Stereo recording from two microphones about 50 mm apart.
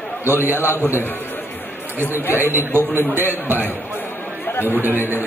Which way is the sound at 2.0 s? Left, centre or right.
Right.